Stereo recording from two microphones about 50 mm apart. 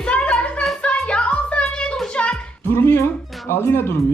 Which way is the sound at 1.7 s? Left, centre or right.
Centre.